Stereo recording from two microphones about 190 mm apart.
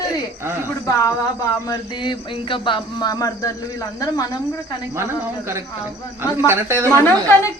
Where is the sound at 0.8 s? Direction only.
15° left (ahead or behind).